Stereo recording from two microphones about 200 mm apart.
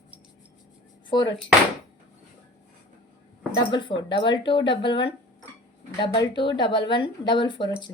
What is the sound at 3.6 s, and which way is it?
Speech, 25° left (ahead or behind).